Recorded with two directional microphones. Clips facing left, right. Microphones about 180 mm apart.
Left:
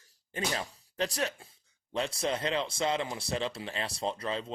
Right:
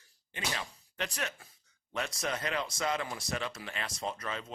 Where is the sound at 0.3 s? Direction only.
35° left (ahead or behind).